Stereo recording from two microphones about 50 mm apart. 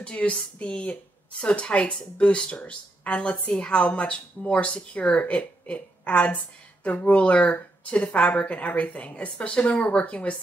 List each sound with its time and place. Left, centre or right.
0.0 s a woman's voice: left